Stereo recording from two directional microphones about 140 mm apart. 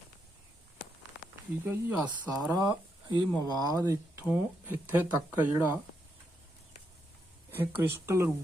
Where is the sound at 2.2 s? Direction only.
Centre (ahead or behind).